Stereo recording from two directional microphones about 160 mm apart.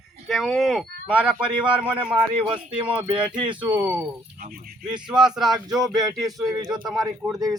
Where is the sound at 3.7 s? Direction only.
10° right (ahead or behind).